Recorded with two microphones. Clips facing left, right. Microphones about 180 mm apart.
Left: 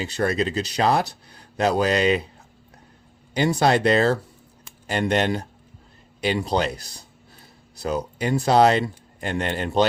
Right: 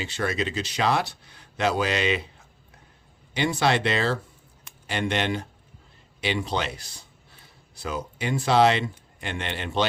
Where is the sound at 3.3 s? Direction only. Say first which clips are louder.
Left 4 dB; 40° left (ahead or behind).